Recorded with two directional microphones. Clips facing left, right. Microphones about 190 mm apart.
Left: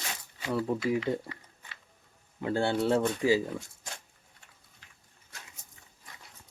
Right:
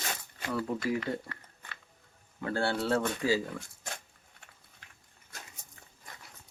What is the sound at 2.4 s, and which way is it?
Speech, 20° left (ahead or behind).